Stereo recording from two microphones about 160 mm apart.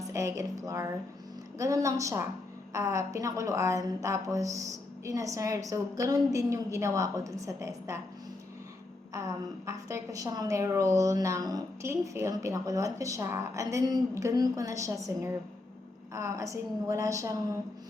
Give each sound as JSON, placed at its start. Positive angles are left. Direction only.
{"t": 0.0, "sound": "a woman's voice", "side_deg": -20}
{"t": 9.1, "sound": "a woman's voice", "side_deg": -20}